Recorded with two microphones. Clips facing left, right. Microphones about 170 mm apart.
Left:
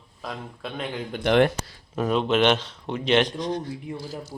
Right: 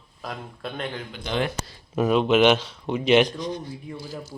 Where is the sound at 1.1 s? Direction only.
65° left (ahead or behind).